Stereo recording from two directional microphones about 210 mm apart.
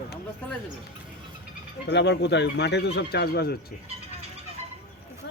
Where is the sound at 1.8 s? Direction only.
55° left (ahead or behind).